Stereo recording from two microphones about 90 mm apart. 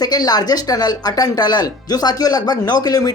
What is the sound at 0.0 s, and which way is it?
Speech, 45° left (ahead or behind).